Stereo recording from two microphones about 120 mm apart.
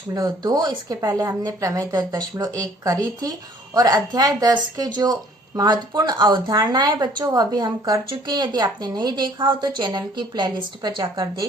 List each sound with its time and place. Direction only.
0.1 s speech: 30° right (ahead or behind)